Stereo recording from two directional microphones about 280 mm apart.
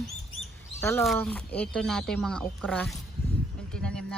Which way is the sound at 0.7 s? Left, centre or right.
Centre.